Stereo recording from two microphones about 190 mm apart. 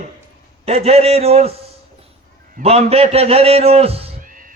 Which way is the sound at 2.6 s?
35° right (ahead or behind).